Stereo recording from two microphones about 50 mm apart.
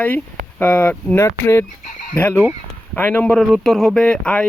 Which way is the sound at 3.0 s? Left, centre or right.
Left.